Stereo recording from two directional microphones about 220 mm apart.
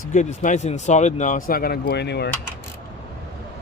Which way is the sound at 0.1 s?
35° left (ahead or behind).